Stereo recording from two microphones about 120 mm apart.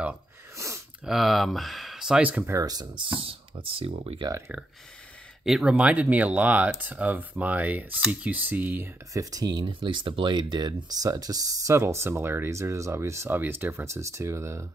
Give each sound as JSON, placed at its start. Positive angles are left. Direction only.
{"t": 0.6, "sound": "a sound", "side_deg": -25}
{"t": 1.0, "sound": "speech", "side_deg": 0}
{"t": 2.5, "sound": "speech", "side_deg": -30}
{"t": 5.4, "sound": "speech", "side_deg": -5}